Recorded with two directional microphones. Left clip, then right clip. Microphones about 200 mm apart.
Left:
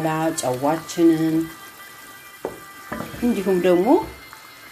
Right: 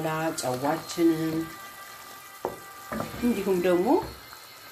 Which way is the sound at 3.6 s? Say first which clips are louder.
Left 7 dB; 20° left (ahead or behind).